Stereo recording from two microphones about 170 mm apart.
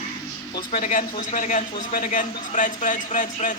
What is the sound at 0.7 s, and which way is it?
A man's voice, 50° left (ahead or behind).